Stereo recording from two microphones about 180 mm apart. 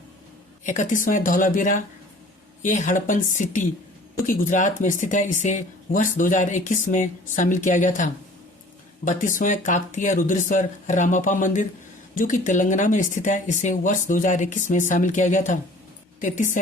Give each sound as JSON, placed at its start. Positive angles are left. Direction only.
{"t": 0.6, "sound": "speech", "side_deg": 45}